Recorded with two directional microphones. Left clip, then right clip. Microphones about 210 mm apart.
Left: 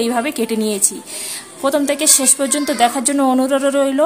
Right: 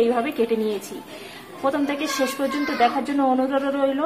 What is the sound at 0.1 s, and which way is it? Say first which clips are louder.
A woman's voice: left 3 dB; 60° left (ahead or behind).